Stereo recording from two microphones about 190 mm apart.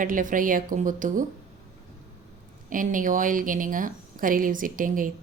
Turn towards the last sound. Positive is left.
turn(degrees=-45)  # may be behind; listen again after turning